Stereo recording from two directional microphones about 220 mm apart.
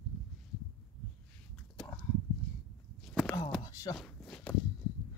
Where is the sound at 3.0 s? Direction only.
Centre (ahead or behind).